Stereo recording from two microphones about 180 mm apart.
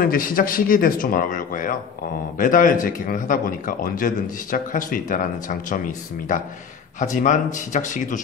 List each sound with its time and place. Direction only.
0.0 s a man's voice: 50° left (ahead or behind)
7.0 s a man's voice: 45° left (ahead or behind)